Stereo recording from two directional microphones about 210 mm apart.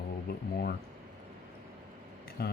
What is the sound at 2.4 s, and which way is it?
Speech, 50° left (ahead or behind).